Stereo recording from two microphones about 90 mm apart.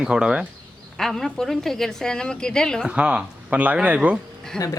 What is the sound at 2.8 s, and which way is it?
Speech, 10° right (ahead or behind).